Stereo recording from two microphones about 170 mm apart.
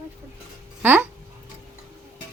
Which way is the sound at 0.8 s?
10° right (ahead or behind).